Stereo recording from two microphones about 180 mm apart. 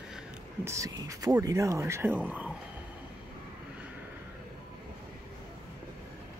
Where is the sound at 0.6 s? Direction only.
15° right (ahead or behind).